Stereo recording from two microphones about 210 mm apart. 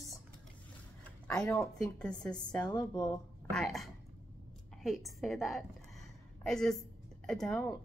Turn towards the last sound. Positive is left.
turn(degrees=5)  # may be behind; listen again after turning